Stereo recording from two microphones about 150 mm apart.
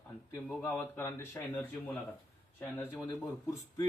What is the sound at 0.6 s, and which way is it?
Speech, 15° left (ahead or behind).